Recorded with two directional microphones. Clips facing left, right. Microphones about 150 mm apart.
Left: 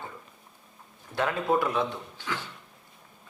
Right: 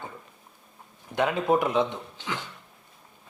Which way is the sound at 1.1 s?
20° right (ahead or behind).